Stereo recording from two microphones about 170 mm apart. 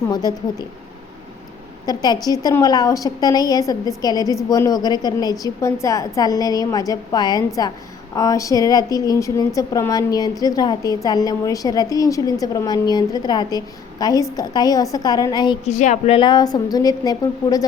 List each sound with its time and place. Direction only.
0.1 s a woman's voice: 25° left (ahead or behind)
1.9 s a woman's voice: 25° left (ahead or behind)
15.6 s a woman's voice: 40° left (ahead or behind)
16.1 s a woman's voice: 25° left (ahead or behind)